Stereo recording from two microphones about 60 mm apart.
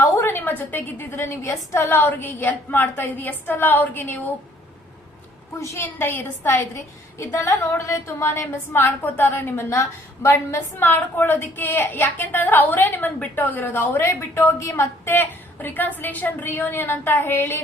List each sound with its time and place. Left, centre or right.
0.2 s a woman's voice: left
5.5 s a woman's voice: left
5.8 s a woman's voice: left
7.2 s a woman's voice: left
10.2 s a woman's voice: left
10.8 s a woman's voice: left
15.0 s a woman's voice: left